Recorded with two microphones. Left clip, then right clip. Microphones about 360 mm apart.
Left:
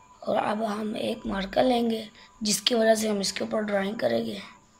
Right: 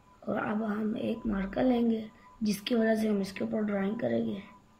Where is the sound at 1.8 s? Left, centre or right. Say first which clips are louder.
Left 3 dB; left.